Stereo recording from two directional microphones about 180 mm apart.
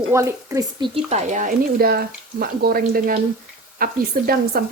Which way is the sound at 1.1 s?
40° right (ahead or behind).